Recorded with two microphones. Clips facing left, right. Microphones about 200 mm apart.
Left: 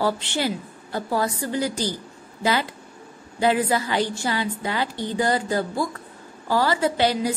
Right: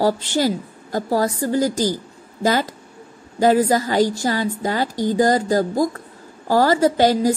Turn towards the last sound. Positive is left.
turn(degrees=-45)  # may be behind; listen again after turning